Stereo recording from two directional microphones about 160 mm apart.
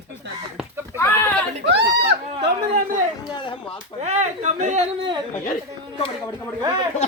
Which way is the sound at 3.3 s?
30° left (ahead or behind).